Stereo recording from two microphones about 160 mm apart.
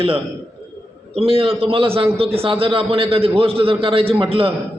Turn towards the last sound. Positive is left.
turn(degrees=-35)  # may be behind; listen again after turning